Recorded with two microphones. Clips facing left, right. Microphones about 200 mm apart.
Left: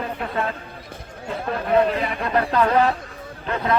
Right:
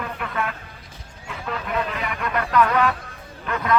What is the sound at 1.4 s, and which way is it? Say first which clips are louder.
Speech: left 3 dB; 55° left (ahead or behind).